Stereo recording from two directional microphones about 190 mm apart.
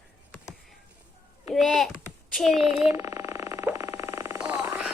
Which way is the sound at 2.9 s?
15° right (ahead or behind).